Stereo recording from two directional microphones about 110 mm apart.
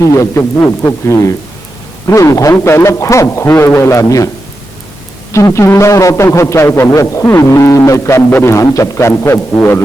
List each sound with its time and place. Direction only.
0.0 s a man's voice: 25° left (ahead or behind)
5.3 s a man's voice: 25° left (ahead or behind)